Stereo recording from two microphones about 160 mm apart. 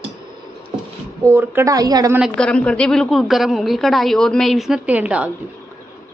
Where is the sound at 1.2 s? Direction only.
15° right (ahead or behind).